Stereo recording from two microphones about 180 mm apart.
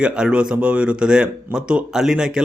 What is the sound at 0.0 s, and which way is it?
Speech, 5° right (ahead or behind).